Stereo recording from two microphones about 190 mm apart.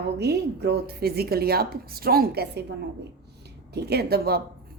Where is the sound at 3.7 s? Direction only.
60° right (ahead or behind).